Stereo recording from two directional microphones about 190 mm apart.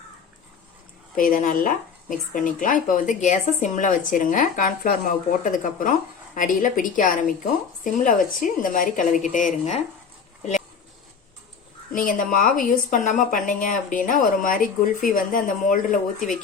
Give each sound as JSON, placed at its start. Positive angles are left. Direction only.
{"t": 1.1, "sound": "a woman's voice", "side_deg": 45}
{"t": 11.9, "sound": "speech", "side_deg": 45}